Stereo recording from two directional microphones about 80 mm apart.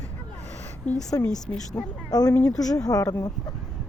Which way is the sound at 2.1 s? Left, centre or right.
Left.